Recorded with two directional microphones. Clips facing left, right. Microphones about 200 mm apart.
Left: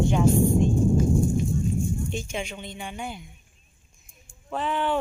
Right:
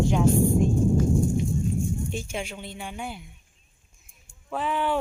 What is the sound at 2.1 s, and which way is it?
A woman's voice, 5° right (ahead or behind).